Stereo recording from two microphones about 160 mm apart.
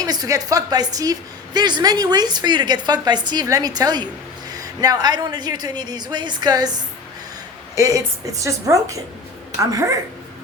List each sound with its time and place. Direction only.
0.0 s a woman's voice: 25° right (ahead or behind)
7.8 s a woman's voice: 20° right (ahead or behind)